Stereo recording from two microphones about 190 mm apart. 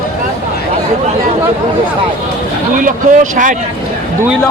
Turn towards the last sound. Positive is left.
turn(degrees=-45)  # may be behind; listen again after turning